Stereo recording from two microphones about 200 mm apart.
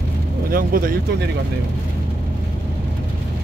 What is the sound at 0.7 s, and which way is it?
Speech, 45° right (ahead or behind).